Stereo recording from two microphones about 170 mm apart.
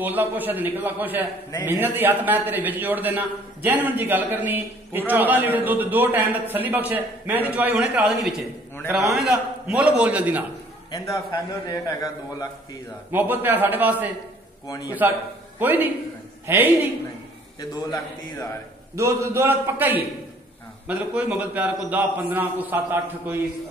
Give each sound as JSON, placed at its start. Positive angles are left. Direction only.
{"t": 0.0, "sound": "a man's voice", "side_deg": -10}
{"t": 11.6, "sound": "a man's voice", "side_deg": 20}
{"t": 13.1, "sound": "a man's voice", "side_deg": -10}
{"t": 14.7, "sound": "a man's voice", "side_deg": 25}
{"t": 15.6, "sound": "a man's voice", "side_deg": -10}
{"t": 17.6, "sound": "a man's voice", "side_deg": 20}
{"t": 18.9, "sound": "a man's voice", "side_deg": -15}